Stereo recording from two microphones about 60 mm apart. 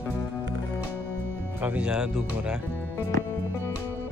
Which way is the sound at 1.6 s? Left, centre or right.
Right.